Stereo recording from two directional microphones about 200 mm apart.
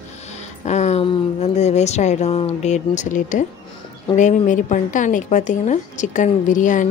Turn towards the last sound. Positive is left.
turn(degrees=40)  # may be behind; listen again after turning